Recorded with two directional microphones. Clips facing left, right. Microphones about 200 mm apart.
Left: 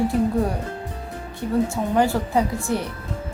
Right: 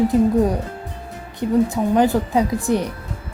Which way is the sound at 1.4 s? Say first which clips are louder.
Right 5 dB; 90° right.